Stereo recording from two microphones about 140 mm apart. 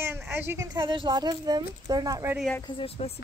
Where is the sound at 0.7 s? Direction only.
35° right (ahead or behind).